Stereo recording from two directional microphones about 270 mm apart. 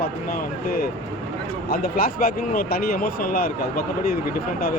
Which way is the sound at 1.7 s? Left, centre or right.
Left.